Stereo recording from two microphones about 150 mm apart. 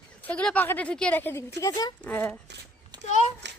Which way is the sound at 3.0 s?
50° left (ahead or behind).